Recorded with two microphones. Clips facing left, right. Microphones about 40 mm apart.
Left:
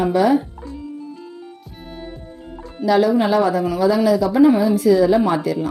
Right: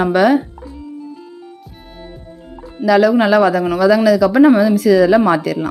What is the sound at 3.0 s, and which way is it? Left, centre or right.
Speech, right.